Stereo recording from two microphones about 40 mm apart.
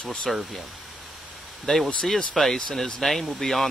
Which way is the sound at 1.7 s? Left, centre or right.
Centre.